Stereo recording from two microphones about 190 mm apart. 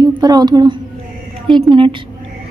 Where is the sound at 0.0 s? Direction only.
20° right (ahead or behind).